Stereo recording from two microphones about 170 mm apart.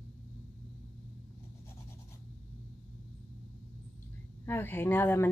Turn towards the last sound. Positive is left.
turn(degrees=15)  # may be behind; listen again after turning